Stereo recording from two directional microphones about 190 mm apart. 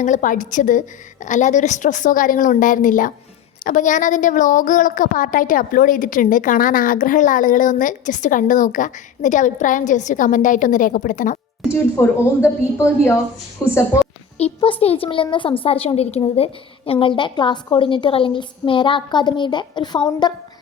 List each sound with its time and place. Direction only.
0.0 s a woman's voice: 40° left (ahead or behind)
11.7 s a woman's voice: 15° left (ahead or behind)
14.3 s a woman's voice: 30° left (ahead or behind)